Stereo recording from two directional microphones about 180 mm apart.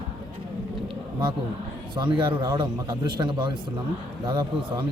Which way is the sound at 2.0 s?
25° right (ahead or behind).